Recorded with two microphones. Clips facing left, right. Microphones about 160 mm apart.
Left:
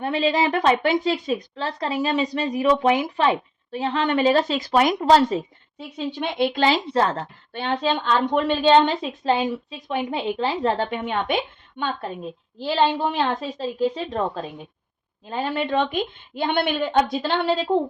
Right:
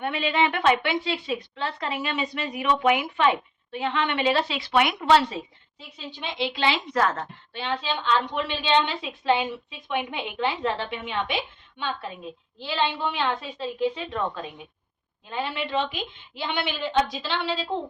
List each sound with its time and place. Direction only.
0.0 s a woman's voice: 35° left (ahead or behind)
6.1 s a woman's voice: 60° left (ahead or behind); by 7.3 s 30° left (ahead or behind)
7.5 s a woman's voice: 50° left (ahead or behind)